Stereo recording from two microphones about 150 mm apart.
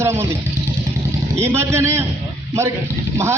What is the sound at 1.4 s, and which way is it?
Speech, 15° right (ahead or behind).